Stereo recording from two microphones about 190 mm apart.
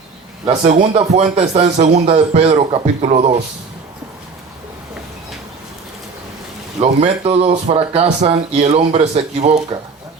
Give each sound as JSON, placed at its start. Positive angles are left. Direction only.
{"t": 0.4, "sound": "speech", "side_deg": -35}
{"t": 6.7, "sound": "speech", "side_deg": -35}